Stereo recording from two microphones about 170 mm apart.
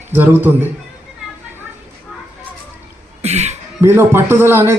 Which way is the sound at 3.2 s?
40° right (ahead or behind).